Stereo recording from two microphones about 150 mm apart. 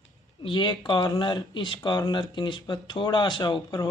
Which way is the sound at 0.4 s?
30° left (ahead or behind).